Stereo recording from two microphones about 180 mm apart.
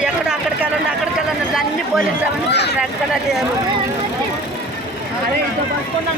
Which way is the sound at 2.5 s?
70° left (ahead or behind).